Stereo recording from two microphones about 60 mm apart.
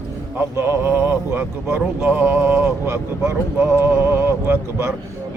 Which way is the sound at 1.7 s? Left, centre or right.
Centre.